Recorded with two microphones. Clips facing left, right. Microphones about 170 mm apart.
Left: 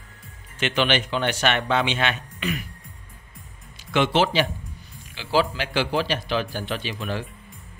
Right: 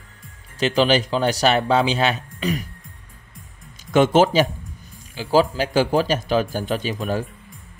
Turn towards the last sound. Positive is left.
turn(degrees=-45)  # may be behind; listen again after turning